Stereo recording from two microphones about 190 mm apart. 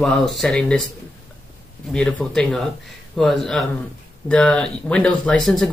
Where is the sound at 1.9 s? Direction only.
5° left (ahead or behind).